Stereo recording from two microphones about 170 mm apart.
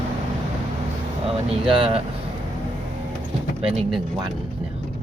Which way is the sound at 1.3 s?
35° right (ahead or behind).